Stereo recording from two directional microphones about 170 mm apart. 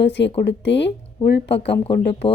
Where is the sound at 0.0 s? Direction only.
90° left.